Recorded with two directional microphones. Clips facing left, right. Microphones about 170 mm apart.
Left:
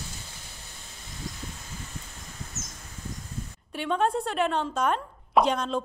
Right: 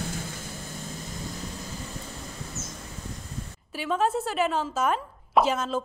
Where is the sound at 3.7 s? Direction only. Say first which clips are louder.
Even; 5° right (ahead or behind).